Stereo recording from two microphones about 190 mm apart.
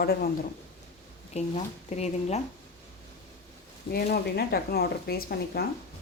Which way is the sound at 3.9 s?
55° left (ahead or behind).